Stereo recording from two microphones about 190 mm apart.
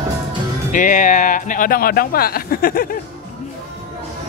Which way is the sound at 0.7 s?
45° left (ahead or behind).